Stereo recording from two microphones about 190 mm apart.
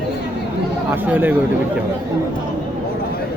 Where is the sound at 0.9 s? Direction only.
10° right (ahead or behind).